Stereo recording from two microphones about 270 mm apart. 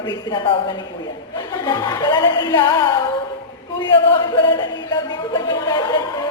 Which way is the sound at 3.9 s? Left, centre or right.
Centre.